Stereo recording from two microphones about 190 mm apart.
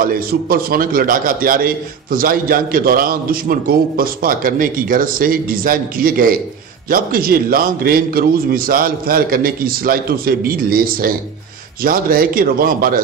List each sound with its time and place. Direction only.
0.0 s a man's voice: 50° right (ahead or behind)